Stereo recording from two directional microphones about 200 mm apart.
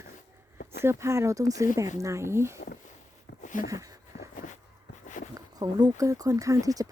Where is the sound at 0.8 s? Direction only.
15° right (ahead or behind).